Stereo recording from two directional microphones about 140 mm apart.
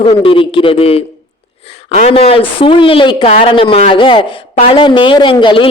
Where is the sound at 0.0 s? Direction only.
40° left (ahead or behind).